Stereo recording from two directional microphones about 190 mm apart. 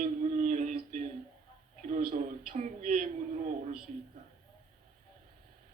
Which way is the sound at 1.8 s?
45° right (ahead or behind).